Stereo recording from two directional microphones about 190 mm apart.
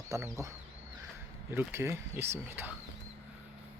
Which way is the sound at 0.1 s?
15° right (ahead or behind).